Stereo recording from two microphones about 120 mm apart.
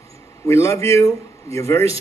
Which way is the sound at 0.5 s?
25° left (ahead or behind).